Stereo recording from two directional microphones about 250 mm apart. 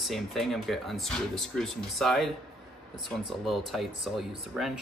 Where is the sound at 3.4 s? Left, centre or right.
Centre.